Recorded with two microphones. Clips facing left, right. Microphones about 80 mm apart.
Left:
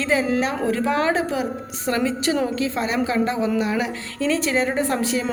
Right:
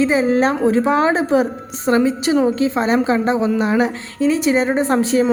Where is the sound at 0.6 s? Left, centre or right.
Right.